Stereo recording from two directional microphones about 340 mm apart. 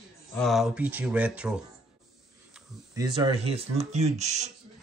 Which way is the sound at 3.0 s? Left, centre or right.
Centre.